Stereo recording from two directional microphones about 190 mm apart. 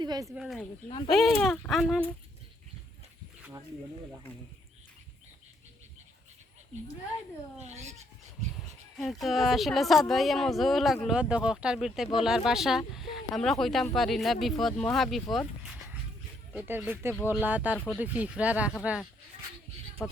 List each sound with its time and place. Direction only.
0.0 s speech: 20° right (ahead or behind)
0.3 s speech: centre (ahead or behind)
0.9 s speech: 25° left (ahead or behind)
1.1 s speech: centre (ahead or behind)
7.6 s speech: 35° right (ahead or behind)
9.0 s speech: centre (ahead or behind)